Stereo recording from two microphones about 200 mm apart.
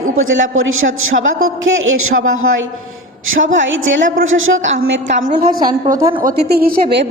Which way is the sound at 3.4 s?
75° right (ahead or behind).